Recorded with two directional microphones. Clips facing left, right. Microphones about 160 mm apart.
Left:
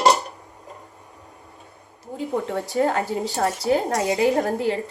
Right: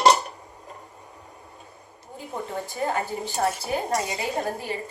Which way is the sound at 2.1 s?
85° left.